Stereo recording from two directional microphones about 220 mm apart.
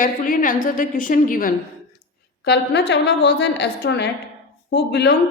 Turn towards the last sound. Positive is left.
turn(degrees=50)  # may be behind; listen again after turning